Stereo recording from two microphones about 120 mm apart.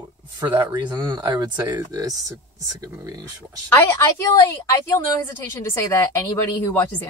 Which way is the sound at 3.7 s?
20° left (ahead or behind).